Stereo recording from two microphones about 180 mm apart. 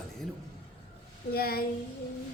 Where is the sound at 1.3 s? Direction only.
55° left (ahead or behind).